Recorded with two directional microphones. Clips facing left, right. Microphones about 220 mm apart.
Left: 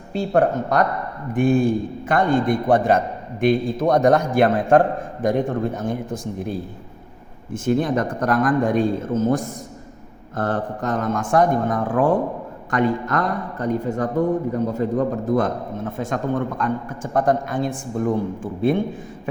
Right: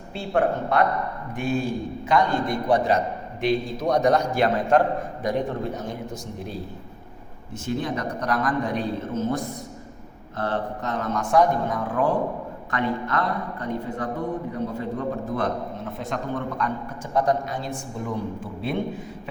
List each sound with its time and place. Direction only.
0.1 s a man's voice: 40° left (ahead or behind)